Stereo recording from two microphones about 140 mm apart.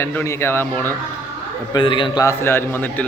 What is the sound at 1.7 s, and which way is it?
Speech, 35° left (ahead or behind).